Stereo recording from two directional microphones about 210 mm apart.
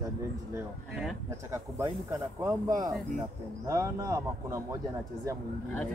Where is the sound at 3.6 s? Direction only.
15° right (ahead or behind).